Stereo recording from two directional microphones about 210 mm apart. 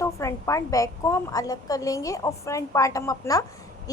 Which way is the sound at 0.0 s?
15° left (ahead or behind).